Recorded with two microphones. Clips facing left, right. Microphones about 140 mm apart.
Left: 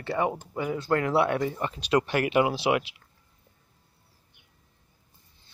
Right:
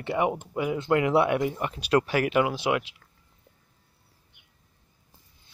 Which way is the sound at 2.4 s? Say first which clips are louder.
Left 1 dB; 30° left (ahead or behind).